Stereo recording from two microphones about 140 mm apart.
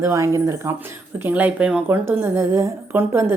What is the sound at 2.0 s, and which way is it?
A woman's voice, 20° right (ahead or behind).